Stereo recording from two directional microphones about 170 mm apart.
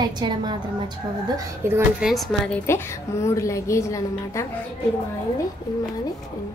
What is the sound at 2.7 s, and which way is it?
Speech, 15° left (ahead or behind).